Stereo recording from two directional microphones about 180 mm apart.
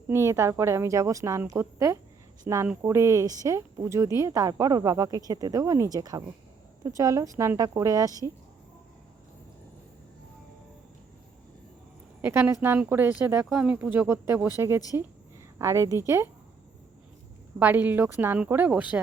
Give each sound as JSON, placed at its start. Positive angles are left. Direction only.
{"t": 0.3, "sound": "speech", "side_deg": -15}
{"t": 12.2, "sound": "speech", "side_deg": -15}
{"t": 15.5, "sound": "speech", "side_deg": -15}
{"t": 17.6, "sound": "speech", "side_deg": -10}